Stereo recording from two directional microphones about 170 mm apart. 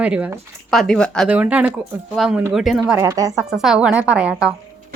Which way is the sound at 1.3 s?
10° right (ahead or behind).